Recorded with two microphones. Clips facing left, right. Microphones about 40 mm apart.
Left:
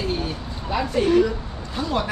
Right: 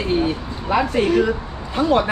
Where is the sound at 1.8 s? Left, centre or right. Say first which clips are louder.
Right 8 dB; right.